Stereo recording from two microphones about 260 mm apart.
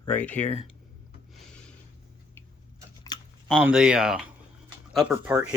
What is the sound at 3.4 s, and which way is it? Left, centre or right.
Speech, centre.